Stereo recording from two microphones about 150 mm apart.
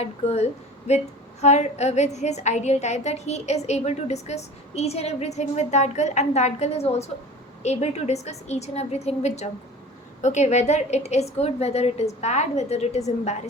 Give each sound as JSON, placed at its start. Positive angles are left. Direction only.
{"t": 0.0, "sound": "a woman's voice", "side_deg": 45}